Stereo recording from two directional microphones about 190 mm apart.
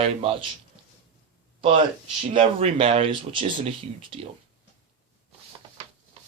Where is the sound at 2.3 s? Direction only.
30° right (ahead or behind).